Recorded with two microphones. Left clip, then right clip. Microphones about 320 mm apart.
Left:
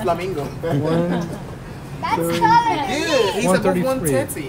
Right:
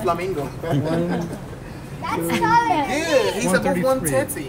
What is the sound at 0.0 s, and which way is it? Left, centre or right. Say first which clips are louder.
A man's voice: left 1 dB; centre.